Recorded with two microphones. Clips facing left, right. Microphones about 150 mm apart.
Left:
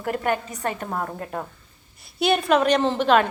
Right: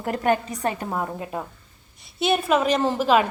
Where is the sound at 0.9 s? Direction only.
10° right (ahead or behind).